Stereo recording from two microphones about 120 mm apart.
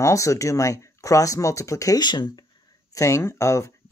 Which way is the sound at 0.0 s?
25° left (ahead or behind).